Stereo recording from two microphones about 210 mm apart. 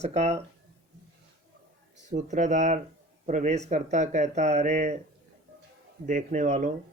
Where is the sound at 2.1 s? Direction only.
35° right (ahead or behind).